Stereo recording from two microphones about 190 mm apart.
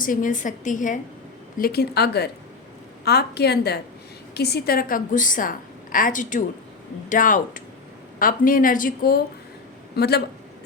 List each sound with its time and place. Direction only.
0.0 s a woman's voice: 45° left (ahead or behind)